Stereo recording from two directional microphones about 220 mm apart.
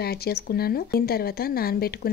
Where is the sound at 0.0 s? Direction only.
45° left (ahead or behind).